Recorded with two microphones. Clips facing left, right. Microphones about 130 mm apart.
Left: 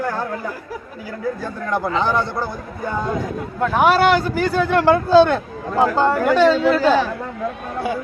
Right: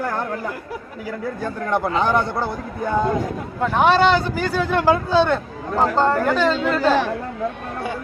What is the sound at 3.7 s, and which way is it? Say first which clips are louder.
Speech: left 1 dB; 5° left (ahead or behind).